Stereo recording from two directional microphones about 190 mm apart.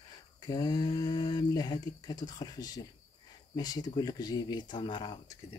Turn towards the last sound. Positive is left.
turn(degrees=25)  # may be behind; listen again after turning